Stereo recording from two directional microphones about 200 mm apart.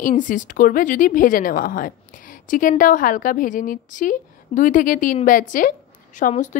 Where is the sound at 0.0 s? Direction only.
40° left (ahead or behind).